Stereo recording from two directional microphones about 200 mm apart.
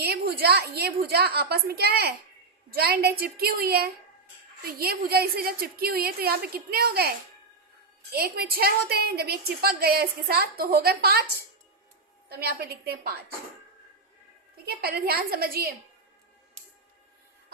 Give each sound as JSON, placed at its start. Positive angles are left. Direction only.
{"t": 0.0, "sound": "a woman's voice", "side_deg": -55}
{"t": 8.1, "sound": "a woman's voice", "side_deg": -50}
{"t": 12.3, "sound": "a woman's voice", "side_deg": -50}
{"t": 14.8, "sound": "a woman's voice", "side_deg": -50}